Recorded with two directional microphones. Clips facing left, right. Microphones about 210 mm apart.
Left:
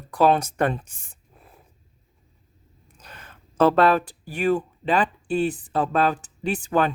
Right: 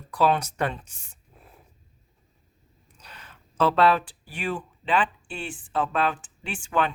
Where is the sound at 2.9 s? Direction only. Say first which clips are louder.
Left 3 dB; 50° left (ahead or behind).